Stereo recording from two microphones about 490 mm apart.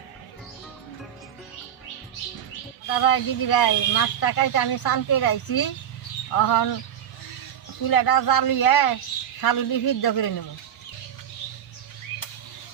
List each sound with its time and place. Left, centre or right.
2.8 s speech: left
7.9 s speech: left